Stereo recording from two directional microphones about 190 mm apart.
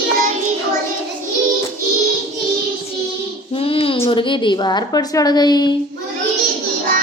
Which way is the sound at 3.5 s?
30° left (ahead or behind).